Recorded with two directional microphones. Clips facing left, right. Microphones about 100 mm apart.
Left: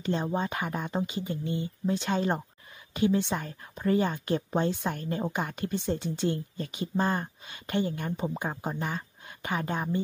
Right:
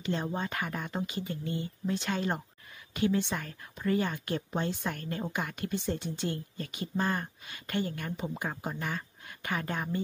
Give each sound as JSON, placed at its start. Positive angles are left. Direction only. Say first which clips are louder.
{"t": 0.1, "sound": "speech", "louder": "left 4 dB", "side_deg": 25}